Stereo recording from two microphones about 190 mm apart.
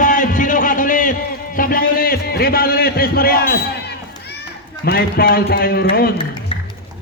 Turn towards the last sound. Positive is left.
turn(degrees=25)  # may be behind; listen again after turning